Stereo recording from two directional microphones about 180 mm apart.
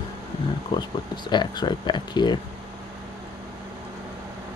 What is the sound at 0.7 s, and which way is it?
Speech, 25° left (ahead or behind).